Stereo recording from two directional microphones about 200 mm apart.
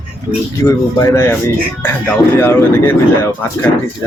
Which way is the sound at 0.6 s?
15° left (ahead or behind).